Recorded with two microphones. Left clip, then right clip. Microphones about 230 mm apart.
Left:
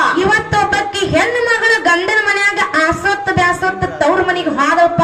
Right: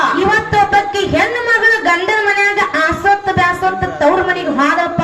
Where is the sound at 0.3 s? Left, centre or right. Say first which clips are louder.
Right 1 dB; left.